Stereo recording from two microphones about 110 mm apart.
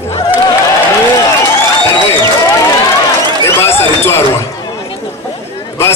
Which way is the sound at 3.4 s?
20° left (ahead or behind).